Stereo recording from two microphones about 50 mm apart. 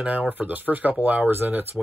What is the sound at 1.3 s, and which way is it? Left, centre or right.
Speech, right.